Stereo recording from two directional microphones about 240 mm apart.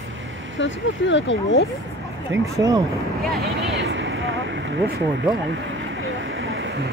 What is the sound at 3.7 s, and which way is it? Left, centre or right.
Vehicle, right.